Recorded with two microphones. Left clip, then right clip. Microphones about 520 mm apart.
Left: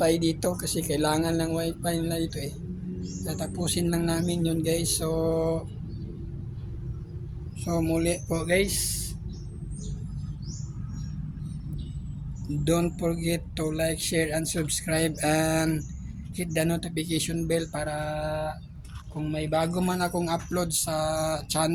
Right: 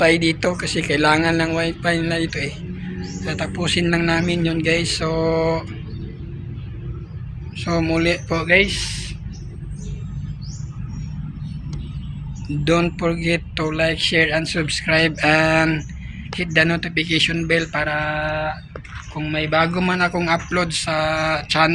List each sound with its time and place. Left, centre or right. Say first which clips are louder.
0.0 s speech: right 8 dB; left
7.6 s speech: right 7 dB; left
12.6 s speech: right 8 dB; left